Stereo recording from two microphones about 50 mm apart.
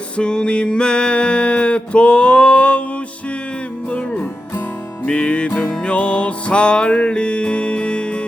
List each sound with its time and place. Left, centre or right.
0.2 s music: centre
3.8 s music: left